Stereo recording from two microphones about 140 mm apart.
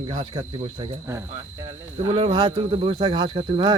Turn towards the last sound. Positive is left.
turn(degrees=-40)  # may be behind; listen again after turning